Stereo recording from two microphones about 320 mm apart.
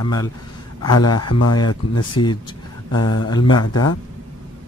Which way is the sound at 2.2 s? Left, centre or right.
Left.